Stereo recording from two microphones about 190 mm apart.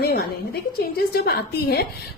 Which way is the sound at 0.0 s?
55° left (ahead or behind).